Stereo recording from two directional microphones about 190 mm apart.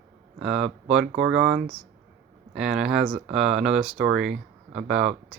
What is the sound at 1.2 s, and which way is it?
Speech, 80° right.